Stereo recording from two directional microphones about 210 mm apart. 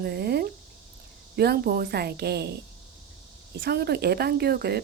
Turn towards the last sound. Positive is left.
turn(degrees=-50)  # may be behind; listen again after turning